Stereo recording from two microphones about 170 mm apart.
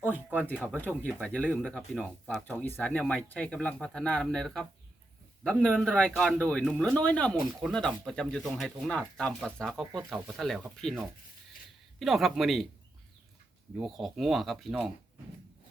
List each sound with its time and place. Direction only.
0.1 s a sound: 10° right (ahead or behind)
0.4 s speech: 5° left (ahead or behind)
13.7 s speech: centre (ahead or behind)